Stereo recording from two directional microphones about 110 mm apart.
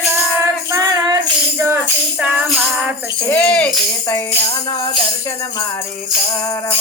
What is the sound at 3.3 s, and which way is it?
Speech, 15° left (ahead or behind).